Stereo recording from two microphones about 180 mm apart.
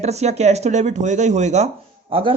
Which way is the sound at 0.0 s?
40° right (ahead or behind).